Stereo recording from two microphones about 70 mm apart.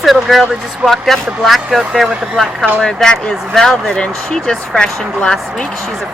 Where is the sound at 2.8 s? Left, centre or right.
Centre.